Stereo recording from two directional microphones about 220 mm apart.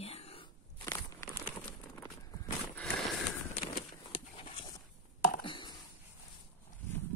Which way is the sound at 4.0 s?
25° left (ahead or behind).